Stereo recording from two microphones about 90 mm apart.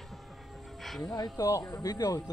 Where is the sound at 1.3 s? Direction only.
40° left (ahead or behind).